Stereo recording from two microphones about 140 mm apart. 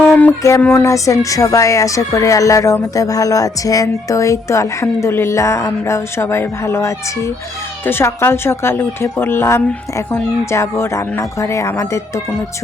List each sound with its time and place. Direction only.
0.0 s music: 10° left (ahead or behind)
0.6 s speech: 15° left (ahead or behind)